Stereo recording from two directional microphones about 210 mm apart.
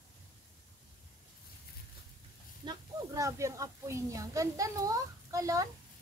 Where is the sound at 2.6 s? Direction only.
20° right (ahead or behind).